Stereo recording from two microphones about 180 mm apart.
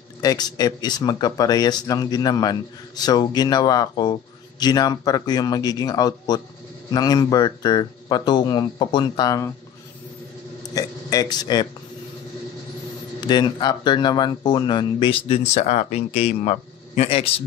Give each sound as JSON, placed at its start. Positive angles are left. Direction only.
{"t": 0.2, "sound": "speech", "side_deg": 20}
{"t": 10.7, "sound": "a sound", "side_deg": 20}
{"t": 13.2, "sound": "speech", "side_deg": 25}